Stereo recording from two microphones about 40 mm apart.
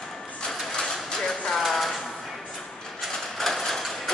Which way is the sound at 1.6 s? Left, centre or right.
Centre.